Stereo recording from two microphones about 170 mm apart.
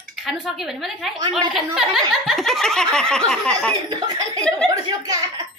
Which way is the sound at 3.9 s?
25° right (ahead or behind).